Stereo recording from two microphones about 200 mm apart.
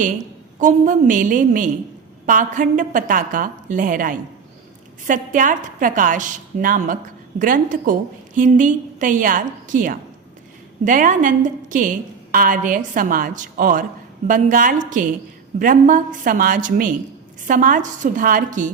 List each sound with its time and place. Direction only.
0.6 s a woman's voice: 40° right (ahead or behind)